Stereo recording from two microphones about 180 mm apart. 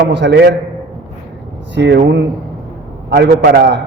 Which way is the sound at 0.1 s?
70° right (ahead or behind).